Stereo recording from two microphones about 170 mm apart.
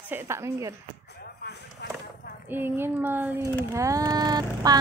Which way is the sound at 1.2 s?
70° left (ahead or behind).